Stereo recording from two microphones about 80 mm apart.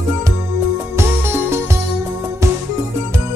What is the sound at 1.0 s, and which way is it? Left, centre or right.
Music, right.